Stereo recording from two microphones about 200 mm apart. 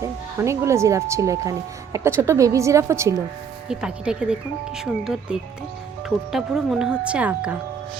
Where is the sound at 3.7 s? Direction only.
5° right (ahead or behind).